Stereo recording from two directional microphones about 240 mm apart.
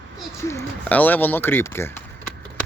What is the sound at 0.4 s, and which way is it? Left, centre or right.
Speech, centre.